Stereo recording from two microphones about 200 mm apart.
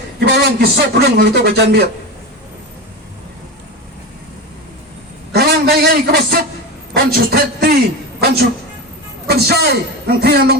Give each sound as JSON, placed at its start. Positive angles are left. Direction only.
{"t": 0.3, "sound": "a man's voice", "side_deg": -55}
{"t": 5.3, "sound": "a sound", "side_deg": -50}
{"t": 6.9, "sound": "a man's voice", "side_deg": -50}
{"t": 9.2, "sound": "a man's voice", "side_deg": -55}